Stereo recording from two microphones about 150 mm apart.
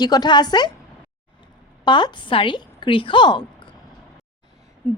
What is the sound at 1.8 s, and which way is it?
A woman's voice, 30° left (ahead or behind).